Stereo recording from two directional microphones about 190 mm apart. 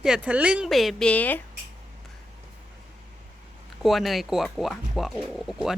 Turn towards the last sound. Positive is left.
turn(degrees=0)  # may be behind; listen again after turning